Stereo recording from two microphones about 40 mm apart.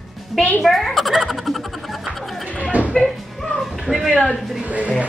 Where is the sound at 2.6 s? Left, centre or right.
Right.